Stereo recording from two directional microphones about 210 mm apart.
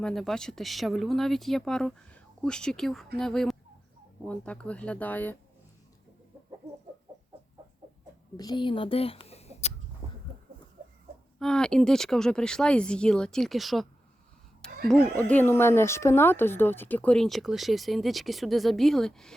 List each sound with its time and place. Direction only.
0.0 s speech: centre (ahead or behind)
8.4 s a child's voice: 20° left (ahead or behind)
10.0 s a sound: 15° right (ahead or behind)
11.3 s speech: 5° left (ahead or behind)
14.8 s speech: 5° left (ahead or behind)